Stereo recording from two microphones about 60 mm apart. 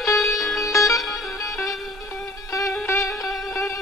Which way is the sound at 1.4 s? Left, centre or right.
Left.